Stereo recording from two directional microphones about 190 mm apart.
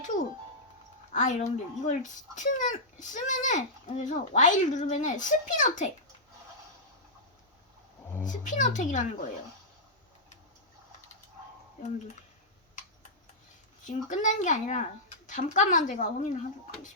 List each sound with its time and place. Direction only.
1.1 s speech: 40° left (ahead or behind)
8.2 s speech: 40° left (ahead or behind)
13.8 s speech: 40° left (ahead or behind)